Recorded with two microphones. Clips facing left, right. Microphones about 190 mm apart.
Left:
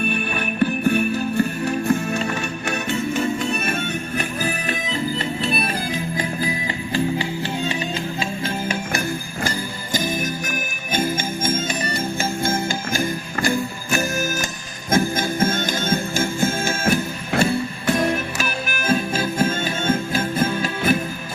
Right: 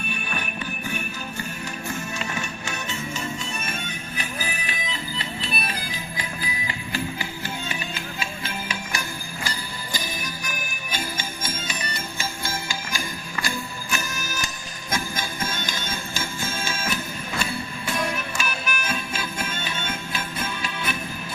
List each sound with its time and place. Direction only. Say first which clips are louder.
0.6 s music: left 13 dB; 60° left (ahead or behind)
4.2 s music: left 7 dB; 45° left (ahead or behind)
6.4 s music: left 8 dB; 35° left (ahead or behind)
8.6 s jingle bell: left 8 dB; 50° left (ahead or behind)
10.9 s music: left 10 dB; 50° left (ahead or behind)
12.2 s jingle bell: left 9 dB; 50° left (ahead or behind)
14.8 s music: left 10 dB; 50° left (ahead or behind)